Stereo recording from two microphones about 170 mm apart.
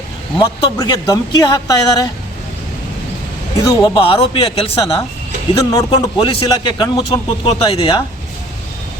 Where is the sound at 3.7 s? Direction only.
30° left (ahead or behind).